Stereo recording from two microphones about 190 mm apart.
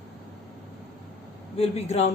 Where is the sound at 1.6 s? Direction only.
35° left (ahead or behind).